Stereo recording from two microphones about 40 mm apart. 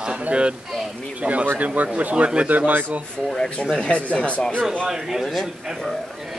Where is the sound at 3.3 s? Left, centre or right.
Left.